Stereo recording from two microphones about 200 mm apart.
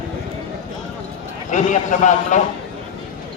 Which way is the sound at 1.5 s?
40° left (ahead or behind).